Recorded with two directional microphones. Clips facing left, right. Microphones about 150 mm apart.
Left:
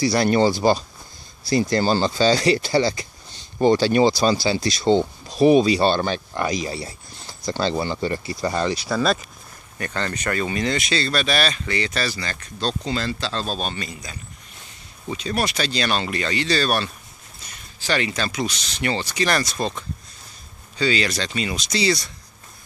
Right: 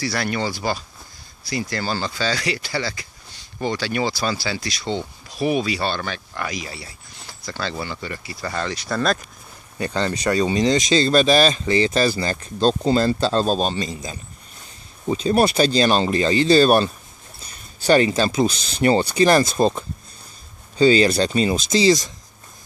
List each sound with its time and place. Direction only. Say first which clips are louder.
0.0 s speech: left 6 dB; 15° left (ahead or behind)
0.3 s speech: left 7 dB; 30° left (ahead or behind)
8.4 s speech: left 3 dB; 15° left (ahead or behind)
9.8 s speech: right 4 dB; 10° right (ahead or behind)
11.1 s speech: right 8 dB; 35° right (ahead or behind)